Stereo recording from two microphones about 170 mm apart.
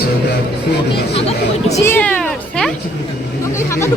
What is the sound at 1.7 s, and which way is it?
Speech, 15° left (ahead or behind).